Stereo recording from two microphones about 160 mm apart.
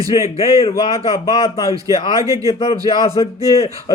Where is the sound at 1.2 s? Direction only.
20° left (ahead or behind).